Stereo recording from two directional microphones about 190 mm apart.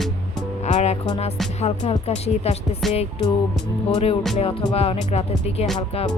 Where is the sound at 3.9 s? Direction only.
35° left (ahead or behind).